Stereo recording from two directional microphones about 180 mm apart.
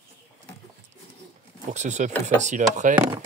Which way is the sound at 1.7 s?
40° right (ahead or behind).